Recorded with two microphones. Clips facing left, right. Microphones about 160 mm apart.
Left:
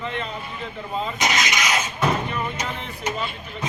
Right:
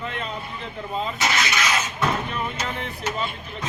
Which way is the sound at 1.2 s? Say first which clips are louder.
Left 1 dB; 15° left (ahead or behind).